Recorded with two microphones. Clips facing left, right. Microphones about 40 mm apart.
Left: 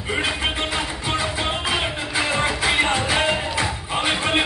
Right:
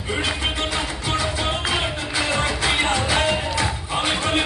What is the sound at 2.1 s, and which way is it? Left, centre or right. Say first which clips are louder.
Music: left 1 dB; centre.